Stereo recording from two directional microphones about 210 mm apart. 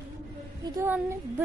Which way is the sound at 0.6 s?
10° right (ahead or behind).